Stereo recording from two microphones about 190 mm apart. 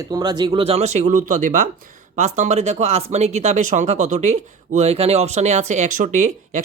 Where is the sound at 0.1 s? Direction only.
20° right (ahead or behind).